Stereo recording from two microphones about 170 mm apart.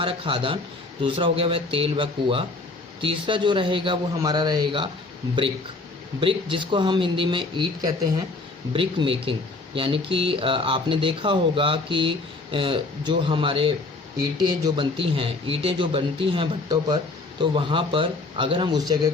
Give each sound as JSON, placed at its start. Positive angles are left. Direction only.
{"t": 0.0, "sound": "speech", "side_deg": -30}
{"t": 6.1, "sound": "speech", "side_deg": -30}